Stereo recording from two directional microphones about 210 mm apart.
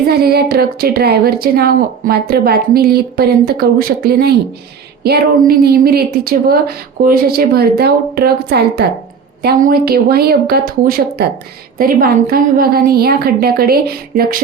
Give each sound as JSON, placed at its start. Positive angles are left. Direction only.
{"t": 0.1, "sound": "a woman's voice", "side_deg": -50}